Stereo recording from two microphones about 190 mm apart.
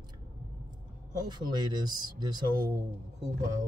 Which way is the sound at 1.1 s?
20° right (ahead or behind).